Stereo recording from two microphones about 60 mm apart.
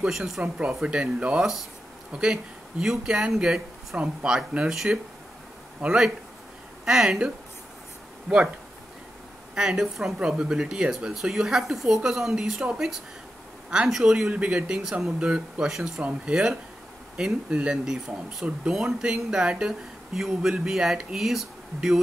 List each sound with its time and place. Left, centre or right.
0.0 s speech: centre
1.4 s speech: centre
9.6 s speech: centre